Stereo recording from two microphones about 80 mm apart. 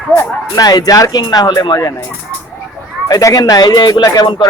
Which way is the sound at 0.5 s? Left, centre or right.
Left.